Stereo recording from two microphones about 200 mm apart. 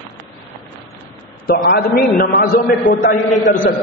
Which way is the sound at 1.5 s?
50° left (ahead or behind).